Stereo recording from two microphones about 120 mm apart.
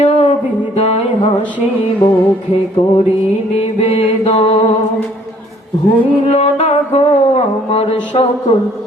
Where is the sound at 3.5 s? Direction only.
55° left (ahead or behind).